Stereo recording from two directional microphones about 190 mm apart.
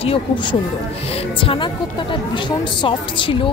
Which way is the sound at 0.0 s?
30° left (ahead or behind).